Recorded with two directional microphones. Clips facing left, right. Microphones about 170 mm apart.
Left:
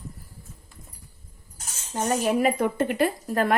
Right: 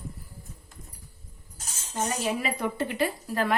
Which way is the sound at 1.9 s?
50° left (ahead or behind).